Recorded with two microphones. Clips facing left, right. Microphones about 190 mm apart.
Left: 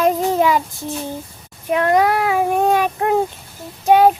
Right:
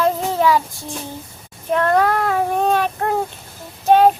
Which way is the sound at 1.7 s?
15° left (ahead or behind).